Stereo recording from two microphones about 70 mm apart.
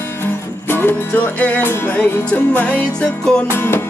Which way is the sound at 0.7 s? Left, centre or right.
Left.